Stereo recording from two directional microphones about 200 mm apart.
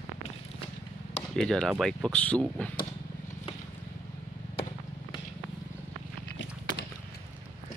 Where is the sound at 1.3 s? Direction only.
5° left (ahead or behind).